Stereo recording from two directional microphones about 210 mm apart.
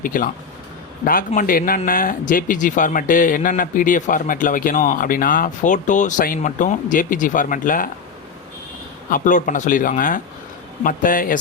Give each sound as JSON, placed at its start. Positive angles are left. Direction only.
{"t": 0.0, "sound": "speech", "side_deg": 40}
{"t": 9.0, "sound": "speech", "side_deg": 40}